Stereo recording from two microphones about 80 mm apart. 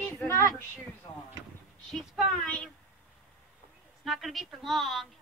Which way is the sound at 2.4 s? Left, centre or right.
Centre.